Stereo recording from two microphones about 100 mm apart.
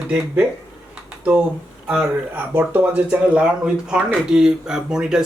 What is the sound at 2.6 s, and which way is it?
Speech, 15° right (ahead or behind).